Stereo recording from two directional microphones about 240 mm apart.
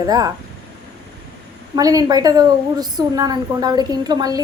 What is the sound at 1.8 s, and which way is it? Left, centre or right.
A woman's voice, centre.